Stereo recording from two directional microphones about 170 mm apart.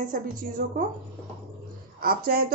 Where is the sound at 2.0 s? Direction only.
60° right (ahead or behind).